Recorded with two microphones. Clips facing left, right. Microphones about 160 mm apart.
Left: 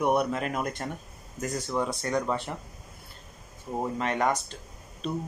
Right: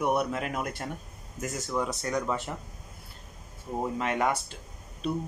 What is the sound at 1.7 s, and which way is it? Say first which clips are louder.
Speech: left 1 dB; 25° left (ahead or behind).